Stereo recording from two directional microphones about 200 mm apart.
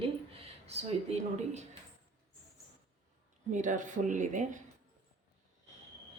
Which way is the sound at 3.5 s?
40° right (ahead or behind).